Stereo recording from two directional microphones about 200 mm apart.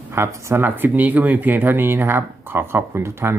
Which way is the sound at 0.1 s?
15° right (ahead or behind).